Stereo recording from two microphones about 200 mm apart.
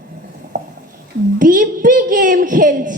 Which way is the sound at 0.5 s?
40° right (ahead or behind).